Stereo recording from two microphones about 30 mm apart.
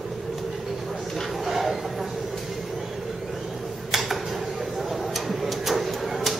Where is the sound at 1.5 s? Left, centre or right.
Centre.